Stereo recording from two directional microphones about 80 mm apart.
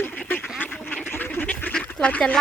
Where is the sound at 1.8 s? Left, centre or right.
Centre.